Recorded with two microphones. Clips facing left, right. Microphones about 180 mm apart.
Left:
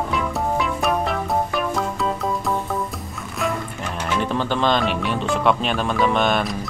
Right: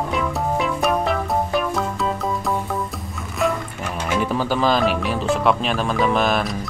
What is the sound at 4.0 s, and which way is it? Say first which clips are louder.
Speech: right 1 dB; 5° right (ahead or behind).